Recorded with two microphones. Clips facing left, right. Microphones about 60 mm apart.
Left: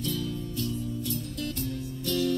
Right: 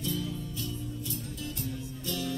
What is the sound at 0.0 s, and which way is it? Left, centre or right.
Music, left.